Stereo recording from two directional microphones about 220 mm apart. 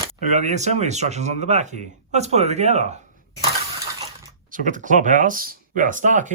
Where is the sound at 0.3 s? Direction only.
35° right (ahead or behind).